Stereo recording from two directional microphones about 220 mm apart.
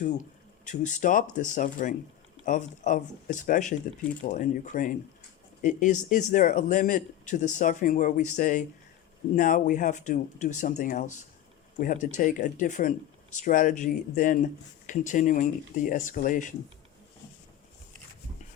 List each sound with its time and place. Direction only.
0.6 s speech: 35° left (ahead or behind)